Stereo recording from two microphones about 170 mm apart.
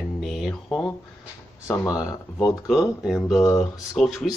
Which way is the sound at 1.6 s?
20° left (ahead or behind).